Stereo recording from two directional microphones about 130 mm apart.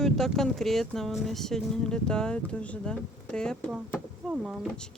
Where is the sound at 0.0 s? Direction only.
5° left (ahead or behind).